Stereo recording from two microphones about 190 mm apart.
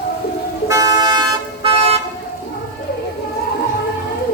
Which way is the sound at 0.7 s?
15° right (ahead or behind).